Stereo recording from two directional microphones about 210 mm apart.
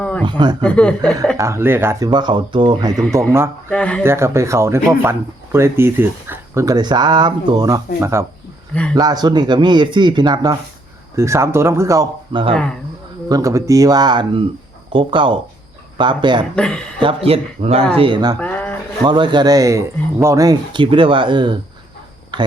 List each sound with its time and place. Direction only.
0.0 s a sound: 5° left (ahead or behind)
0.3 s speech: 20° right (ahead or behind)
0.6 s speech: 5° left (ahead or behind)
1.4 s speech: 10° right (ahead or behind)
3.7 s speech: 5° left (ahead or behind)
4.0 s speech: 10° right (ahead or behind)
8.7 s speech: 5° left (ahead or behind)
9.0 s speech: 20° right (ahead or behind)
16.6 s speech: 5° left (ahead or behind)
17.0 s speech: 25° right (ahead or behind)
18.3 s a sound: 5° left (ahead or behind)
19.0 s speech: 20° right (ahead or behind)